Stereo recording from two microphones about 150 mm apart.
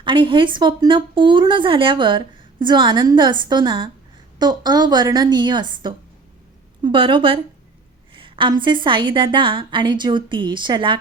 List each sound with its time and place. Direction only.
0.0 s a woman's voice: 35° right (ahead or behind)